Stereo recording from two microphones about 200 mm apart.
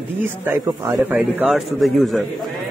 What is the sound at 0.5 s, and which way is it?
A man's voice, 10° right (ahead or behind).